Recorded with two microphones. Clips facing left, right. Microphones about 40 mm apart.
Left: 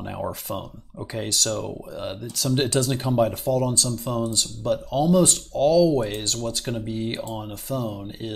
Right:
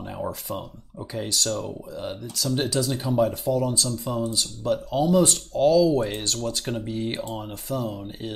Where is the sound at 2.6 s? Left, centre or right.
Left.